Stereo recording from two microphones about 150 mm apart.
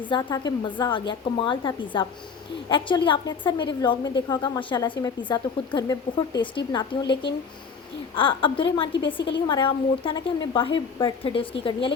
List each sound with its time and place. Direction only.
0.1 s a woman's voice: 25° left (ahead or behind)